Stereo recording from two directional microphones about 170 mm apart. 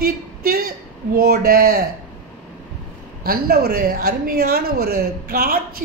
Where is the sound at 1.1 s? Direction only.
65° right (ahead or behind).